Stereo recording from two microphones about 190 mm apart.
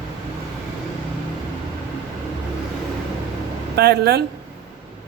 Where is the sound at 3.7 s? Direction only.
60° right (ahead or behind).